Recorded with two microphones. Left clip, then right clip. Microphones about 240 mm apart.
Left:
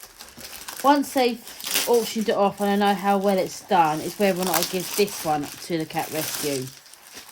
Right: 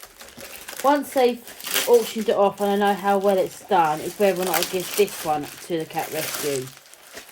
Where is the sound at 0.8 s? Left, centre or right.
Left.